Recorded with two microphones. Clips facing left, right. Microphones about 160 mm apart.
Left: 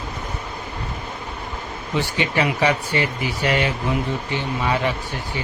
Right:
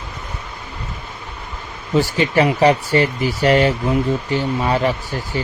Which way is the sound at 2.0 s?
40° right (ahead or behind).